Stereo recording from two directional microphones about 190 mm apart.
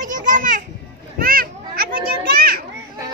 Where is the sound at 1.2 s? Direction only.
50° right (ahead or behind).